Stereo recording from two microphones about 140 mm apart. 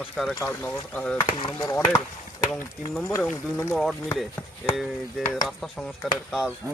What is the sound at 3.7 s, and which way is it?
Speech, centre (ahead or behind).